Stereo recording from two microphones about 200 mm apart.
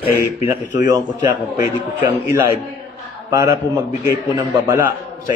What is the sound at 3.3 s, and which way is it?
Speech, 15° right (ahead or behind).